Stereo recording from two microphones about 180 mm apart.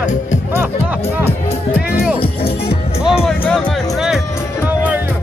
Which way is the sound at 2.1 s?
30° left (ahead or behind).